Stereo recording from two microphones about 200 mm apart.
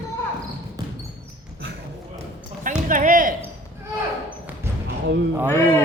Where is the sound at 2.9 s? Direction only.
40° right (ahead or behind).